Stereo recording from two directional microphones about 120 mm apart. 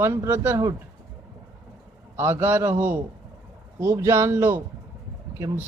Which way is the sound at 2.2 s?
20° right (ahead or behind).